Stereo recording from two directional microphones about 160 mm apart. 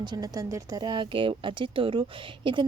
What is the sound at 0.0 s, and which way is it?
A woman's voice, 25° right (ahead or behind).